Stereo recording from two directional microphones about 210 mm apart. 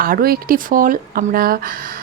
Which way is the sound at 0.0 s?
45° right (ahead or behind).